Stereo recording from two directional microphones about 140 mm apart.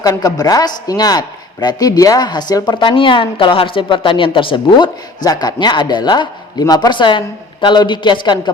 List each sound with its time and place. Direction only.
0.0 s a woman's voice: 25° left (ahead or behind)